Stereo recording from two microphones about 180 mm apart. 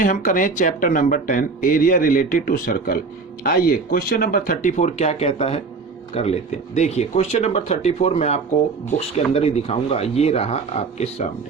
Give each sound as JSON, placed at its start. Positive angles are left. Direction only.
{"t": 0.0, "sound": "speech", "side_deg": 50}